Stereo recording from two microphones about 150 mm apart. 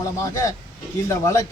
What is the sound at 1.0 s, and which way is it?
Speech, 20° left (ahead or behind).